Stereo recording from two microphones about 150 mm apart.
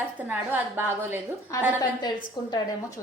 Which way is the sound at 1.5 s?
20° left (ahead or behind).